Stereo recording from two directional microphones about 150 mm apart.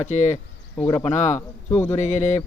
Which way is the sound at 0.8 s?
25° left (ahead or behind).